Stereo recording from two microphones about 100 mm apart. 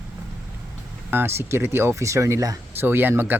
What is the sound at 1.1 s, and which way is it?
Speech, 25° right (ahead or behind).